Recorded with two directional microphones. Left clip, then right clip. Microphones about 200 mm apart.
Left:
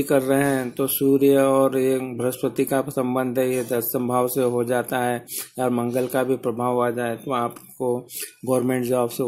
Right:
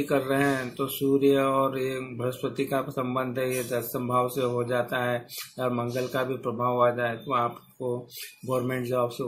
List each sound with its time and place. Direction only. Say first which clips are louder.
0.1 s speech: left 5 dB; 45° left (ahead or behind)